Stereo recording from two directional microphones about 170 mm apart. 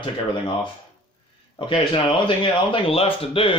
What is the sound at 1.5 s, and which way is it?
Speech, 30° left (ahead or behind).